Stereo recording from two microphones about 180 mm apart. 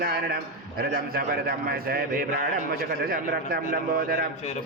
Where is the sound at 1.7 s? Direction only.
55° right (ahead or behind).